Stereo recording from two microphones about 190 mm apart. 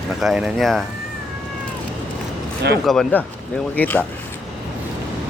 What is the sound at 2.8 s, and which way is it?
Speech, 5° left (ahead or behind).